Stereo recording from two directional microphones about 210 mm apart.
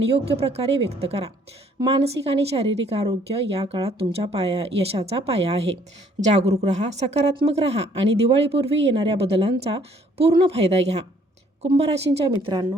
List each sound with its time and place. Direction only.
0.0 s a woman's voice: 30° right (ahead or behind)